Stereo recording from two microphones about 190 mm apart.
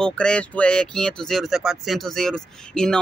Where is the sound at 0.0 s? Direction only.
5° left (ahead or behind).